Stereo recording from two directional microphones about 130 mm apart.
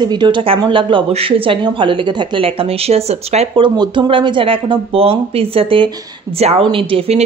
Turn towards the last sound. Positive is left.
turn(degrees=-50)  # may be behind; listen again after turning